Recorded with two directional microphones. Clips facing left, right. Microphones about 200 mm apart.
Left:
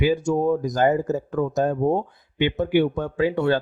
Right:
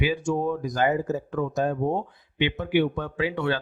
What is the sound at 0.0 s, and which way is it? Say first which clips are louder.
A man's voice: left 5 dB; 45° left (ahead or behind).